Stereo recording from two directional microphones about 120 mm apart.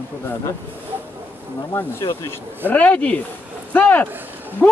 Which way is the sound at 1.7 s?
20° left (ahead or behind).